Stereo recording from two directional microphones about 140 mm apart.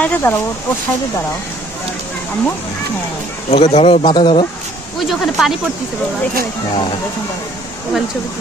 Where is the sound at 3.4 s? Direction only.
45° left (ahead or behind).